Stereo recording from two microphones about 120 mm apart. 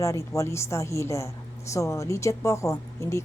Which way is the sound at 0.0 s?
25° left (ahead or behind).